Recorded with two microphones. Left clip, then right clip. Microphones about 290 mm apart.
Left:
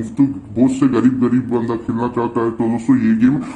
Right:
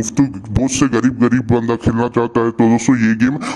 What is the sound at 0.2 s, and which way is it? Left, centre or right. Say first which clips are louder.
A man's voice: left 2 dB; right.